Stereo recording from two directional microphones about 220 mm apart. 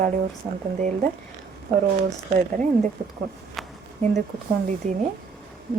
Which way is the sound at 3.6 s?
Centre (ahead or behind).